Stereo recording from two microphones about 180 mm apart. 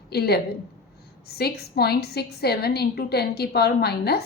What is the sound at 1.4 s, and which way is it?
A woman's voice, 60° left (ahead or behind).